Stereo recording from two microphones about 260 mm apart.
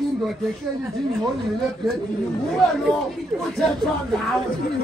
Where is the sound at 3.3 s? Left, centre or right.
Centre.